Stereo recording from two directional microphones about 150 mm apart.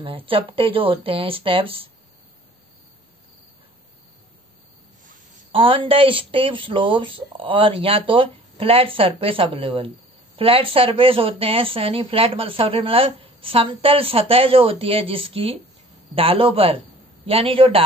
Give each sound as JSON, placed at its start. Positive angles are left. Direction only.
{"t": 0.0, "sound": "speech", "side_deg": -40}
{"t": 5.5, "sound": "speech", "side_deg": -35}